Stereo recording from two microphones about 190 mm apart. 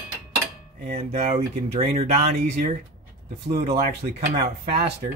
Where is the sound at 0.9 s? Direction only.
35° right (ahead or behind).